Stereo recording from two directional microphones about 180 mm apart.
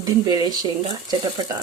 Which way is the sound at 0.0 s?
20° right (ahead or behind).